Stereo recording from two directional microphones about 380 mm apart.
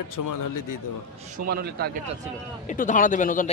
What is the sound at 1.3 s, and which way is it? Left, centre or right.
Speech, right.